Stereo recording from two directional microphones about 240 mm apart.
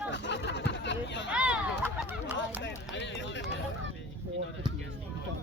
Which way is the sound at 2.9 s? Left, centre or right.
Left.